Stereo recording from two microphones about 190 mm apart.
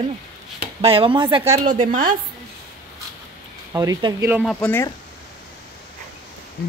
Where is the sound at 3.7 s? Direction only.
20° right (ahead or behind).